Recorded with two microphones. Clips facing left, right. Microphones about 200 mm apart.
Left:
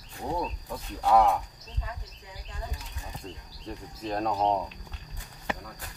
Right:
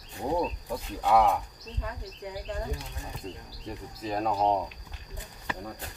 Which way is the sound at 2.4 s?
55° right (ahead or behind).